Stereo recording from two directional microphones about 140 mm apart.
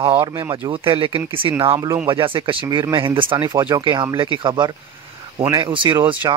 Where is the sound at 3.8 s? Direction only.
35° right (ahead or behind).